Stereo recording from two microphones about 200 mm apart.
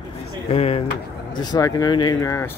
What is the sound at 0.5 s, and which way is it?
Speech, 30° left (ahead or behind).